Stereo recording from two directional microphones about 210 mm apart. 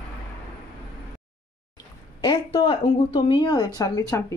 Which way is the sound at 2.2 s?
20° left (ahead or behind).